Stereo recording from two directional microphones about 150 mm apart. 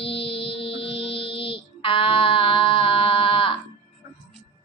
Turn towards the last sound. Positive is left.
turn(degrees=35)  # may be behind; listen again after turning